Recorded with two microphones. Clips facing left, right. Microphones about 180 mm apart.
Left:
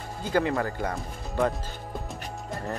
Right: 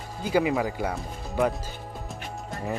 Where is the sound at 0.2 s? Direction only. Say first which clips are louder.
Right 2 dB; 10° right (ahead or behind).